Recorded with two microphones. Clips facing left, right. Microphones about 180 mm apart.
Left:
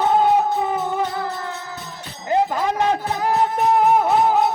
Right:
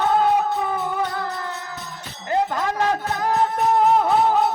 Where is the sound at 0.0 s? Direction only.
20° left (ahead or behind).